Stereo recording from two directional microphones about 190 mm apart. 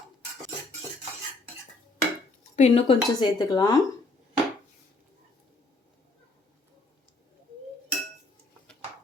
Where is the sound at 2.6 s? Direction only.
35° left (ahead or behind).